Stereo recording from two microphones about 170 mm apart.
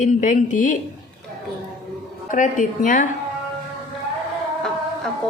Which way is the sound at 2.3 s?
50° left (ahead or behind).